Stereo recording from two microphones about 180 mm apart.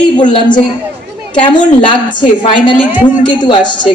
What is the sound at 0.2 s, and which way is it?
Speech, 25° left (ahead or behind).